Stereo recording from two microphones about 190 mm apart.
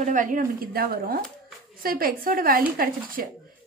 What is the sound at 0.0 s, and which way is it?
A woman's voice, 45° right (ahead or behind).